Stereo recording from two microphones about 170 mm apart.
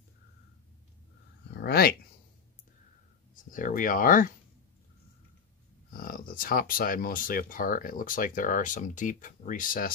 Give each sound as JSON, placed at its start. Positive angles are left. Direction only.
{"t": 1.5, "sound": "a sound", "side_deg": 70}
{"t": 3.3, "sound": "speech", "side_deg": 55}
{"t": 5.9, "sound": "speech", "side_deg": 55}